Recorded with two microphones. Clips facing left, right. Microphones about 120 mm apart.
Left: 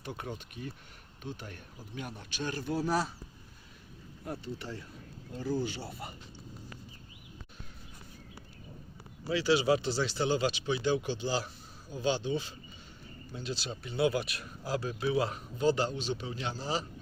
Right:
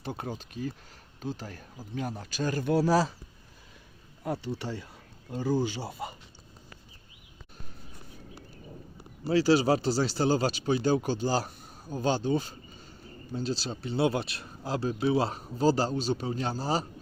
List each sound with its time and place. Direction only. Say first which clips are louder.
0.0 s speech: right 4 dB; 30° right (ahead or behind)
2.6 s speech: right 7 dB; 80° right
4.2 s speech: right 6 dB; 90° right
9.3 s speech: right 4 dB; 40° right (ahead or behind)